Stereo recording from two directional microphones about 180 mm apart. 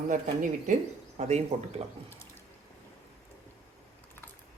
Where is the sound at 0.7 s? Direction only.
40° right (ahead or behind).